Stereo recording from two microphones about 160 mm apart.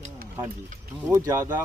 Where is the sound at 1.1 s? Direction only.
20° right (ahead or behind).